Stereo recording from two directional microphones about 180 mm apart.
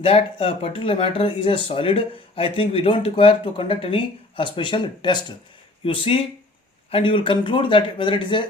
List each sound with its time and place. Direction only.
0.0 s speech: 30° left (ahead or behind)